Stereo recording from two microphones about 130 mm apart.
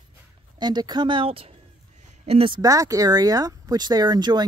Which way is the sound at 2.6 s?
25° right (ahead or behind).